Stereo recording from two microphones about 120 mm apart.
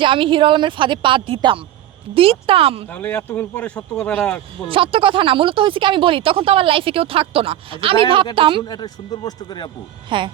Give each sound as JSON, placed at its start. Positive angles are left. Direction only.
{"t": 0.0, "sound": "speech", "side_deg": -45}
{"t": 2.9, "sound": "speech", "side_deg": 10}
{"t": 4.7, "sound": "speech", "side_deg": -50}
{"t": 8.6, "sound": "speech", "side_deg": 35}
{"t": 10.1, "sound": "speech", "side_deg": -45}